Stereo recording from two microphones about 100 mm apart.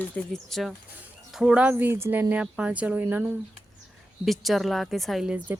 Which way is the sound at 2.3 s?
10° right (ahead or behind).